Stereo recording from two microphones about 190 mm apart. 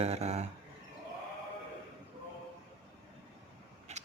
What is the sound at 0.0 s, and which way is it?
Speech, 35° right (ahead or behind).